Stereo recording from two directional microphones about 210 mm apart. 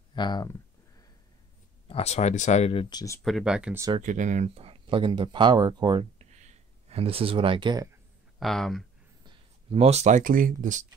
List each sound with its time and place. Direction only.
0.1 s a sound: 20° left (ahead or behind)
1.9 s speech: 30° left (ahead or behind)
3.2 s speech: centre (ahead or behind)
4.0 s speech: 35° right (ahead or behind); by 6.2 s 20° right (ahead or behind)
6.3 s a sound: 35° right (ahead or behind); by 8.0 s 20° right (ahead or behind)
8.4 s speech: centre (ahead or behind)
9.2 s speech: 25° right (ahead or behind)